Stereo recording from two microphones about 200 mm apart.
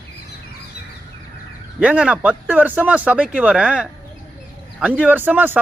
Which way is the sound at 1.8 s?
5° right (ahead or behind).